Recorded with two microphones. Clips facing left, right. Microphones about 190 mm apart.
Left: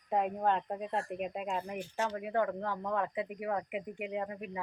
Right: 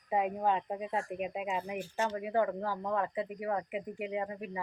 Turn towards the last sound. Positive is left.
turn(degrees=0)  # may be behind; listen again after turning